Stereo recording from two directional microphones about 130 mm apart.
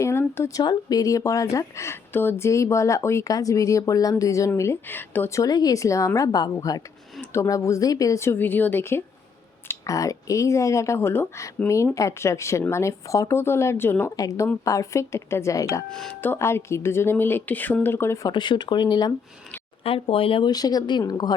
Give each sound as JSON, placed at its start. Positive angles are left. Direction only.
{"t": 0.0, "sound": "speech", "side_deg": 20}
{"t": 15.9, "sound": "speech", "side_deg": 5}
{"t": 18.3, "sound": "speech", "side_deg": 35}
{"t": 19.8, "sound": "speech", "side_deg": 45}
{"t": 20.5, "sound": "speech", "side_deg": 30}